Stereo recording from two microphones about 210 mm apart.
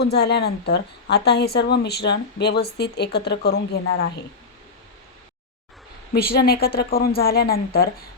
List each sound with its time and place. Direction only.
0.0 s a woman's voice: 50° left (ahead or behind)
6.1 s a woman's voice: 45° left (ahead or behind)